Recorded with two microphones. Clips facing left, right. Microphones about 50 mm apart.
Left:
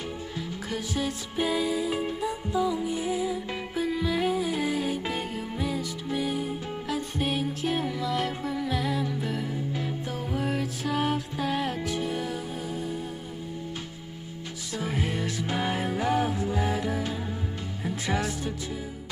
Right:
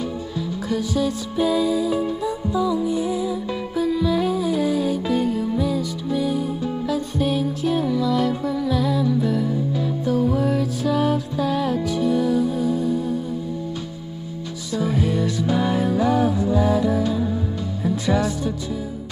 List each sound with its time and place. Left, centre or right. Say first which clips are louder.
0.7 s music: right 8 dB; left
14.7 s music: right 8 dB; left